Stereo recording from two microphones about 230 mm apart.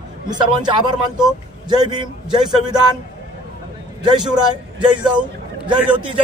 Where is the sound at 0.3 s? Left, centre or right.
Centre.